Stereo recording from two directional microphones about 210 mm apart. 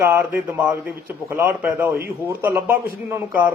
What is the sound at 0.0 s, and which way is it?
A man's voice, 10° right (ahead or behind).